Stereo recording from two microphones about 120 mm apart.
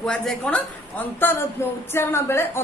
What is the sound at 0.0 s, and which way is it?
A man's voice, 5° left (ahead or behind).